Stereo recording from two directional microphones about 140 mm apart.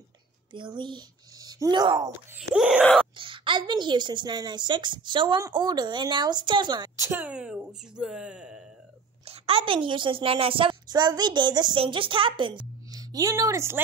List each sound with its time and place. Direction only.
0.5 s speech: 35° right (ahead or behind)
2.3 s speech: 5° right (ahead or behind)
3.2 s a woman's voice: 35° right (ahead or behind)
7.0 s speech: 15° right (ahead or behind)
9.2 s a woman's voice: 45° right (ahead or behind); by 13.7 s 20° right (ahead or behind)